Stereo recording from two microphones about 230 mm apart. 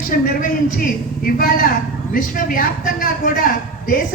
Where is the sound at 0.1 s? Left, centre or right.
Left.